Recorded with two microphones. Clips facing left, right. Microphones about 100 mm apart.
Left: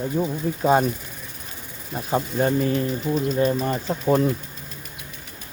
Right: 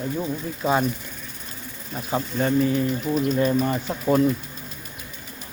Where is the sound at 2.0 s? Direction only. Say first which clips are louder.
Left 2 dB; 5° left (ahead or behind).